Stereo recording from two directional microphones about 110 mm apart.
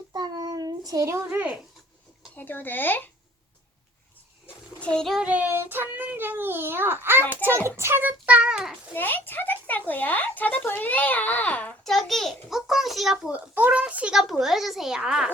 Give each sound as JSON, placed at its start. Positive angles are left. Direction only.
{"t": 0.1, "sound": "child singing", "side_deg": -40}
{"t": 1.3, "sound": "a child's voice", "side_deg": -15}
{"t": 2.3, "sound": "a woman's voice", "side_deg": 15}
{"t": 4.8, "sound": "a child's voice", "side_deg": 10}
{"t": 5.2, "sound": "a child's voice", "side_deg": -15}
{"t": 9.0, "sound": "a woman's voice", "side_deg": 20}
{"t": 11.8, "sound": "speech", "side_deg": 0}
{"t": 13.3, "sound": "speech", "side_deg": -15}